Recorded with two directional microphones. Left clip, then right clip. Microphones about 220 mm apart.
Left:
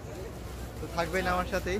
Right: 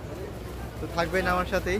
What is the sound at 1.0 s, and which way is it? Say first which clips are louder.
Speech: right 4 dB; centre (ahead or behind).